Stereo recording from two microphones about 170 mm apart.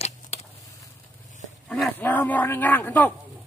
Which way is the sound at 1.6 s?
5° left (ahead or behind).